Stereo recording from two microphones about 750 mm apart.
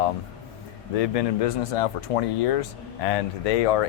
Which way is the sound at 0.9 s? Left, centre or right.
Left.